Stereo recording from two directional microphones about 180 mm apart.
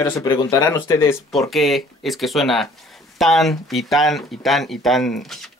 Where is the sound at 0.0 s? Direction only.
20° left (ahead or behind).